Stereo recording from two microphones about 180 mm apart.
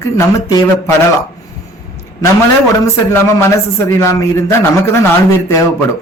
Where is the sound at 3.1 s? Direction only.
15° left (ahead or behind).